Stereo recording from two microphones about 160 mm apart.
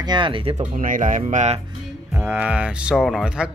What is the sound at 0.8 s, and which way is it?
Speech, 55° right (ahead or behind).